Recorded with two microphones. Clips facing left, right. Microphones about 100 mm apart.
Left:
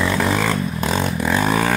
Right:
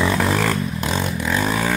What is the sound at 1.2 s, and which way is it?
Vehicle, 10° left (ahead or behind).